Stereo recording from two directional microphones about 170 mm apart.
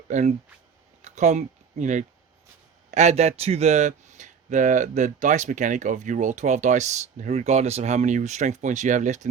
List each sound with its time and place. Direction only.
0.1 s speech: 45° right (ahead or behind)